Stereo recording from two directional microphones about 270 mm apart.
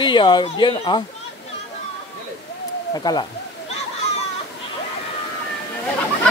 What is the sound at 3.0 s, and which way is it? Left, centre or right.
Speech, centre.